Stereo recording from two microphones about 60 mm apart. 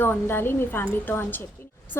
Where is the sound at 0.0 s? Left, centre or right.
Left.